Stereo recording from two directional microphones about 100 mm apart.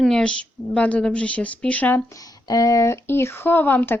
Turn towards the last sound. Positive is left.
turn(degrees=20)  # may be behind; listen again after turning